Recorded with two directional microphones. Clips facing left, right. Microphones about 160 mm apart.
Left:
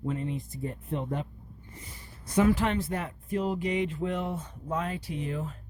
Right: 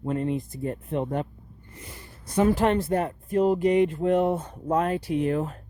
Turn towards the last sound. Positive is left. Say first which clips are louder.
# right 9 dB
turn(degrees=-60)  # may be behind; listen again after turning